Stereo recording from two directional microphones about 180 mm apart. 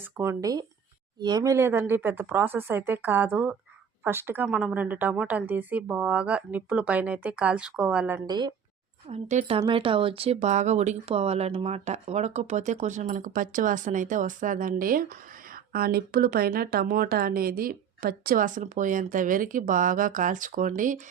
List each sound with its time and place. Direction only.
0.2 s a woman's voice: 15° right (ahead or behind)
8.3 s speech: 25° right (ahead or behind)
9.0 s speech: 40° right (ahead or behind)